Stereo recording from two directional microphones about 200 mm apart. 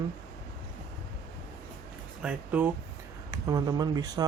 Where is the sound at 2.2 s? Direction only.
5° right (ahead or behind).